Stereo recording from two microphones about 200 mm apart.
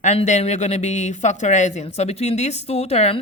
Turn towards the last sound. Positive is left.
turn(degrees=30)  # may be behind; listen again after turning